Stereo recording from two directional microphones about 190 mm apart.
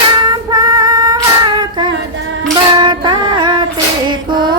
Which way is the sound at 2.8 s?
25° right (ahead or behind).